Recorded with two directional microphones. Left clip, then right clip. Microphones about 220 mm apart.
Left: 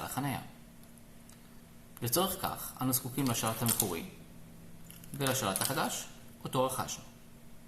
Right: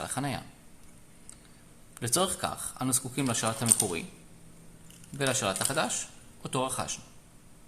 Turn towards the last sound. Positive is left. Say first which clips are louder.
# right 1 dB
turn(degrees=-40)  # may be behind; listen again after turning